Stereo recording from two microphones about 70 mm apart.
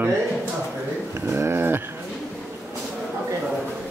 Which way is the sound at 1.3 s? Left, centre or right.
Right.